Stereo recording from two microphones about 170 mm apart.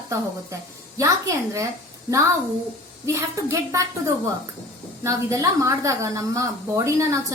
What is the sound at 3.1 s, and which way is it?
A woman's voice, 15° right (ahead or behind).